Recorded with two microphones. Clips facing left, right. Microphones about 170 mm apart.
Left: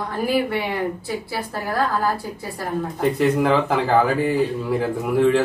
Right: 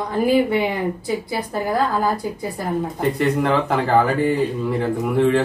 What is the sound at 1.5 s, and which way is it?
Speech, 15° right (ahead or behind).